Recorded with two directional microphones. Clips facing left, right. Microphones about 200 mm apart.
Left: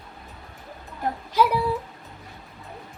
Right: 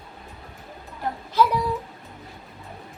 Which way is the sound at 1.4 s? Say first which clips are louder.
Even; 10° left (ahead or behind).